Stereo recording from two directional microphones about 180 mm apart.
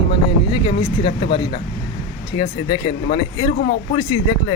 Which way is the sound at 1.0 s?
25° left (ahead or behind).